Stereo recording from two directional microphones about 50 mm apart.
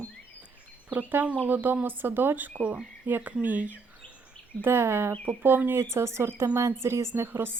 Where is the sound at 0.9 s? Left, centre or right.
Right.